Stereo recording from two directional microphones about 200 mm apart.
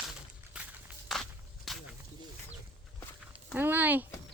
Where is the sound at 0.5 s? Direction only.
5° right (ahead or behind).